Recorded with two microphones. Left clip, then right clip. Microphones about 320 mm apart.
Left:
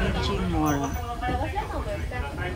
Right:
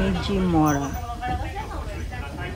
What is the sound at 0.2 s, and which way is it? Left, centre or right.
Speech, centre.